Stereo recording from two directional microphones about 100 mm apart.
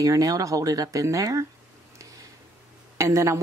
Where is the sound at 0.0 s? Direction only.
35° right (ahead or behind).